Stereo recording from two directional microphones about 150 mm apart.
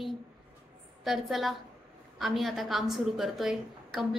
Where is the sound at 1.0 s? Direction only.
Centre (ahead or behind).